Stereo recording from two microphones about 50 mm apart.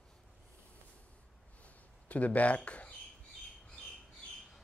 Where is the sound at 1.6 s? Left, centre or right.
Left.